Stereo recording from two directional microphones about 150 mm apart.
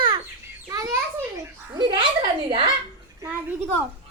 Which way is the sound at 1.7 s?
30° right (ahead or behind).